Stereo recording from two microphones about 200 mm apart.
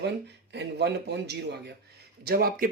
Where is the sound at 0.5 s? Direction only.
55° right (ahead or behind).